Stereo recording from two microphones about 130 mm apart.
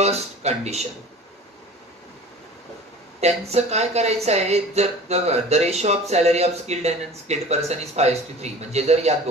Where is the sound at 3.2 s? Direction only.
55° right (ahead or behind).